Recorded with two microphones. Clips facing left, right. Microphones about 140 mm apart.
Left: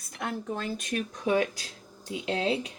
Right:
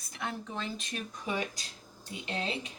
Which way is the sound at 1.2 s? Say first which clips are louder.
Left 9 dB; 90° left.